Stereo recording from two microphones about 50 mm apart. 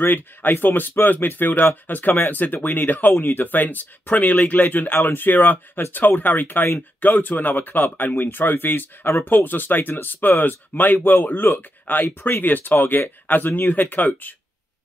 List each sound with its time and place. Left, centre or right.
0.0 s speech: left